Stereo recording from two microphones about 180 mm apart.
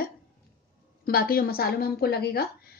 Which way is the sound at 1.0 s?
55° left (ahead or behind).